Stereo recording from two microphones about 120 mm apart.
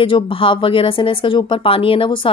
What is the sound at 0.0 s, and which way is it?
Speech, 45° left (ahead or behind).